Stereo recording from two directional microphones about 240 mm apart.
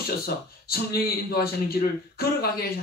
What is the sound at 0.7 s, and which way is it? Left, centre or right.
A man's voice, left.